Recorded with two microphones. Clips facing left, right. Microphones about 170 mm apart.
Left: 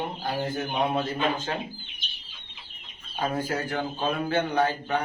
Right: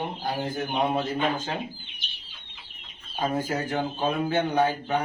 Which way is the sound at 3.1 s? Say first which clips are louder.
Right 1 dB; 15° right (ahead or behind).